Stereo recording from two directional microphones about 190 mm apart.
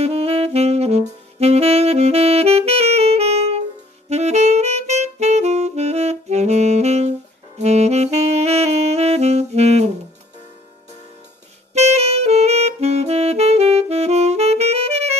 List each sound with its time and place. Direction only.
0.0 s saxophone: 30° right (ahead or behind)
11.7 s saxophone: 35° right (ahead or behind)